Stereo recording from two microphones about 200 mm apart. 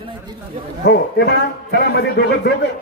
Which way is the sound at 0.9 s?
50° left (ahead or behind).